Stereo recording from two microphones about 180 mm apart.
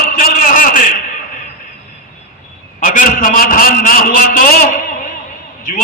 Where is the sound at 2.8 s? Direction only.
50° left (ahead or behind).